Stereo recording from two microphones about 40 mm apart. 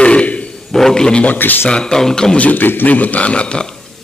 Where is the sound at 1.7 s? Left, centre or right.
Left.